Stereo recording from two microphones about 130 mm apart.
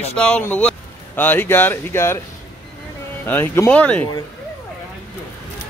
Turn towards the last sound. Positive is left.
turn(degrees=10)  # may be behind; listen again after turning